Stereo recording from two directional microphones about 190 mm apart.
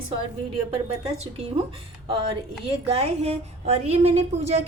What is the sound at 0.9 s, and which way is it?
Speech, 35° right (ahead or behind).